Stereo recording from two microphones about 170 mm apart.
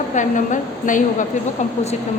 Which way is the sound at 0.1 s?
45° left (ahead or behind).